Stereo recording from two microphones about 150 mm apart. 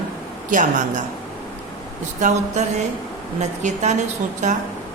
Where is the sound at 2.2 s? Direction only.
55° right (ahead or behind).